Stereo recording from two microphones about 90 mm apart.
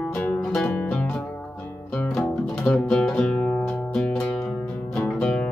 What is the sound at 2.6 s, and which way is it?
Music, 10° left (ahead or behind).